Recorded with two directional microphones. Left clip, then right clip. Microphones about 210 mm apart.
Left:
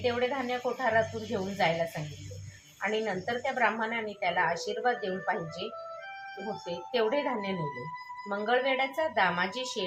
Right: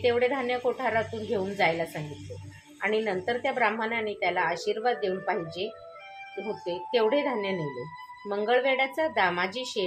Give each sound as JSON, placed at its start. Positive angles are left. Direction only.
{"t": 0.0, "sound": "a woman's voice", "side_deg": -35}
{"t": 2.8, "sound": "a woman's voice", "side_deg": -35}
{"t": 6.9, "sound": "a woman's voice", "side_deg": -35}